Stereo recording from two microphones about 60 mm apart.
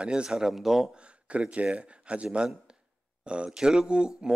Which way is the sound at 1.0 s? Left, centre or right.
Centre.